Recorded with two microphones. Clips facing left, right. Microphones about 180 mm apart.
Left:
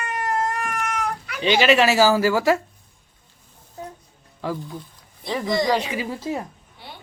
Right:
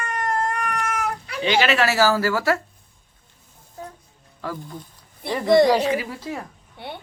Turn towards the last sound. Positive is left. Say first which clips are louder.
# right 7 dB
turn(degrees=-60)  # may be behind; listen again after turning